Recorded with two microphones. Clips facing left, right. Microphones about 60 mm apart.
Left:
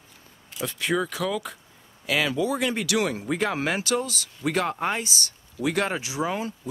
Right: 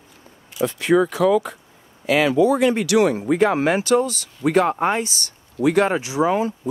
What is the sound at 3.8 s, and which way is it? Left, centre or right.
Speech, centre.